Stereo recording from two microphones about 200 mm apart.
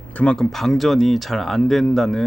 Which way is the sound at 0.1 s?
5° left (ahead or behind).